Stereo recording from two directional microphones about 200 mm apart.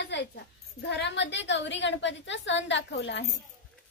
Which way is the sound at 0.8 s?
60° left (ahead or behind).